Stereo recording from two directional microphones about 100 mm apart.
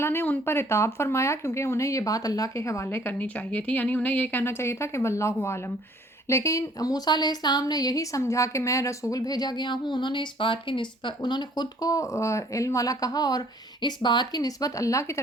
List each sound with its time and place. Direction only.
0.0 s a woman's voice: 25° left (ahead or behind)